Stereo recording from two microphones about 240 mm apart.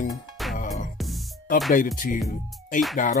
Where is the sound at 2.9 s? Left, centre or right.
Left.